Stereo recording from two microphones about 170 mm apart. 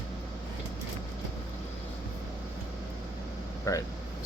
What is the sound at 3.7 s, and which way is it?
Speech, 20° left (ahead or behind).